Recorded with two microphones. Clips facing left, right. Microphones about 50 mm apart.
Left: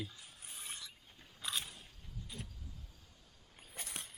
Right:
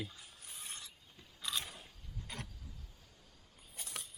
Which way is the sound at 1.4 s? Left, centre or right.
Centre.